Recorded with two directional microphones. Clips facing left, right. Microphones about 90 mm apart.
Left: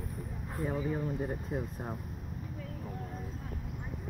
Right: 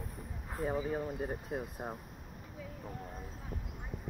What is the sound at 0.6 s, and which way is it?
Speech, 15° right (ahead or behind).